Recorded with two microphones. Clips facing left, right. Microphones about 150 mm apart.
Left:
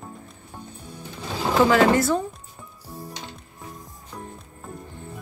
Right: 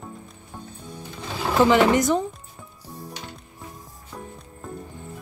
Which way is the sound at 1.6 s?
20° right (ahead or behind).